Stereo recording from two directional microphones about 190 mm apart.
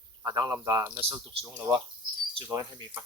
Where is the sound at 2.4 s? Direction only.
20° right (ahead or behind).